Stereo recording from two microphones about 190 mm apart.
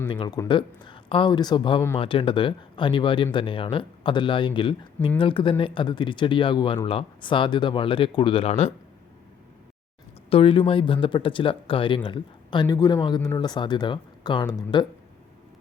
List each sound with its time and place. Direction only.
0.1 s speech: 25° left (ahead or behind)
10.2 s speech: 30° left (ahead or behind)